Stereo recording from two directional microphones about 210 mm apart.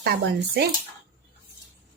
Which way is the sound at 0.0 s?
50° right (ahead or behind).